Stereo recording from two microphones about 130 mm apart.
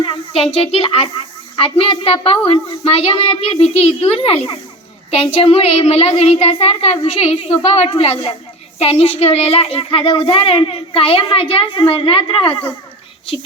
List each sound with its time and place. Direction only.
0.0 s a woman's voice: 45° left (ahead or behind)